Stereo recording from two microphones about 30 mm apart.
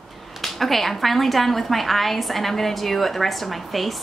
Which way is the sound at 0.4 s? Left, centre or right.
Centre.